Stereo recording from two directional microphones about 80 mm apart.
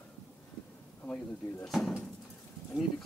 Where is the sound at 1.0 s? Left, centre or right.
Centre.